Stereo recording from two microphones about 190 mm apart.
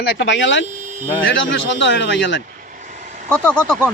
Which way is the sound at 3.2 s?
5° left (ahead or behind).